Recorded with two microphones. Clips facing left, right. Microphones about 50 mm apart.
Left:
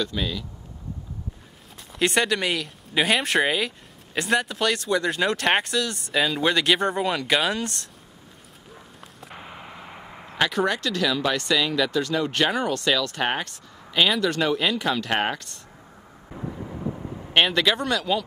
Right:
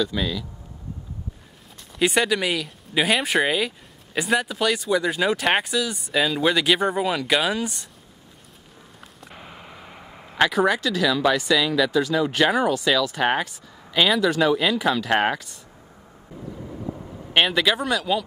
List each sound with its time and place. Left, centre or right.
0.0 s speech: centre
1.8 s speech: centre
9.0 s speech: centre
16.3 s vehicle: left
17.3 s speech: centre